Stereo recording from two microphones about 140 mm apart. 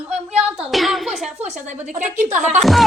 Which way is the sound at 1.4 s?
55° right (ahead or behind).